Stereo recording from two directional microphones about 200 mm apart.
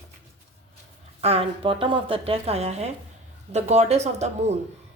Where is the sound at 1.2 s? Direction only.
30° right (ahead or behind).